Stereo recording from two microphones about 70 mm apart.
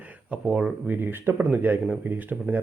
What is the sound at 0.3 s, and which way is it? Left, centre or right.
Speech, centre.